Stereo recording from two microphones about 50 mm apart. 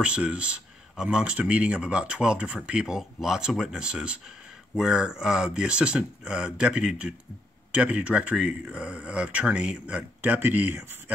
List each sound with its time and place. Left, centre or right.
0.0 s speech: right
3.0 s speech: centre
10.2 s speech: right